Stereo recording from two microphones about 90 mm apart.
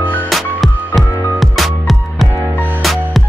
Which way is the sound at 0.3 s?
Centre (ahead or behind).